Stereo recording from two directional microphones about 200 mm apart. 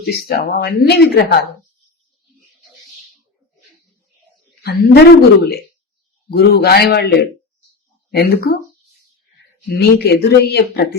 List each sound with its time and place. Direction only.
0.0 s speech: 50° left (ahead or behind)
4.6 s speech: 50° left (ahead or behind)
8.1 s speech: 50° left (ahead or behind)
9.6 s speech: 55° left (ahead or behind)